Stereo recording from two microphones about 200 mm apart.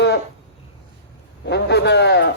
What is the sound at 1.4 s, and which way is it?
Speech, 55° left (ahead or behind).